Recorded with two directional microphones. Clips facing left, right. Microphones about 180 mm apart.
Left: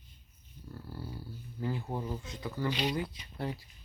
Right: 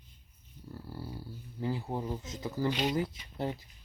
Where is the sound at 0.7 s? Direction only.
15° right (ahead or behind).